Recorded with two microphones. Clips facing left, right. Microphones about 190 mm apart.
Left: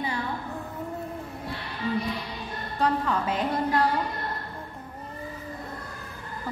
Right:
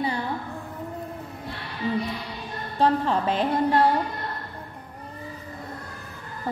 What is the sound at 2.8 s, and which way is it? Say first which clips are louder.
A woman's voice: right 4 dB; 30° right (ahead or behind).